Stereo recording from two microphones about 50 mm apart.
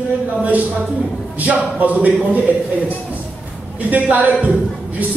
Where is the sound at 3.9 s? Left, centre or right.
Right.